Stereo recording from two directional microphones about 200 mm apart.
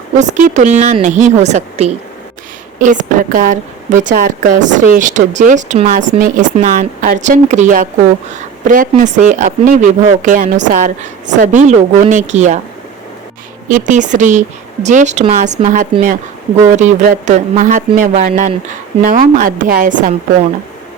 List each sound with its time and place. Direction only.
0.2 s speech: 40° right (ahead or behind)
13.7 s a woman's voice: 40° right (ahead or behind)